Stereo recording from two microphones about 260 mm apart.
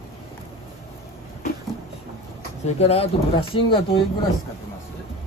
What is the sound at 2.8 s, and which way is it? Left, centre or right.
Speech, left.